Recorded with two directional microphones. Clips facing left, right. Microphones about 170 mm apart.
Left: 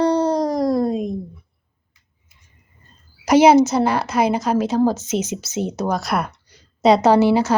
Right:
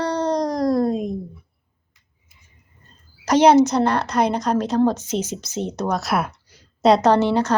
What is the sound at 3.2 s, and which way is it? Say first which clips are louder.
A woman's voice: left 2 dB; 10° left (ahead or behind).